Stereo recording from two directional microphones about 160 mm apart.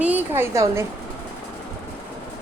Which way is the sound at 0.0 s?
10° right (ahead or behind).